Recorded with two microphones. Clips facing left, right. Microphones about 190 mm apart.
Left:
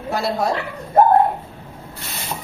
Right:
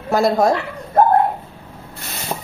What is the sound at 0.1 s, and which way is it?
Speech, 45° right (ahead or behind).